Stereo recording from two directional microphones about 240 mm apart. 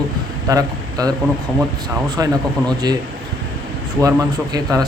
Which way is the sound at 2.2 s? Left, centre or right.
Centre.